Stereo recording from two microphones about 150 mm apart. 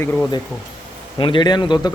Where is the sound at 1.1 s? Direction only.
35° left (ahead or behind).